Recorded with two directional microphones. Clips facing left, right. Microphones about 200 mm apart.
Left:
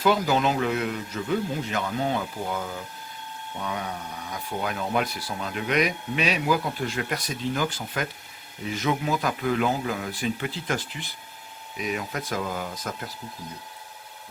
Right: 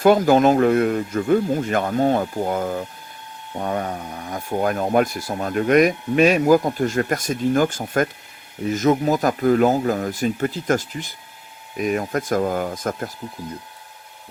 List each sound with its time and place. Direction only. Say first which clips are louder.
0.0 s speech: right 8 dB; 50° right (ahead or behind)